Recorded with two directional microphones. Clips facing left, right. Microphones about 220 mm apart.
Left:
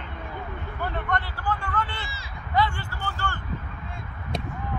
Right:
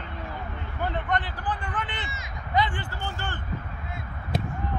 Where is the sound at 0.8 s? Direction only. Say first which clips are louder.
Right 1 dB; 20° right (ahead or behind).